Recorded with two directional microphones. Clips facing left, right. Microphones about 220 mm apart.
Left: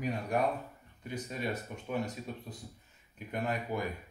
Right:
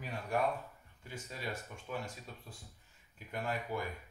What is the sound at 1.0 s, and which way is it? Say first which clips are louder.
Speech: left 7 dB; 20° left (ahead or behind).